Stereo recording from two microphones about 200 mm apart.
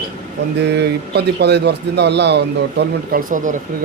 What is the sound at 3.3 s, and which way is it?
Speech, 40° right (ahead or behind).